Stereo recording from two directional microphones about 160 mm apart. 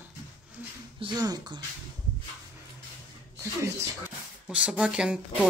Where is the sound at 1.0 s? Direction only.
25° right (ahead or behind).